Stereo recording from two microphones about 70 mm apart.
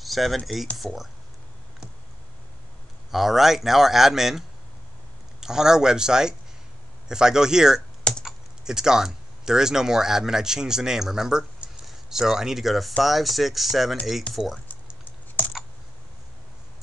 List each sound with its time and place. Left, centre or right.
0.0 s a sound: centre
0.7 s speech: centre
3.1 s speech: centre
14.7 s typing: left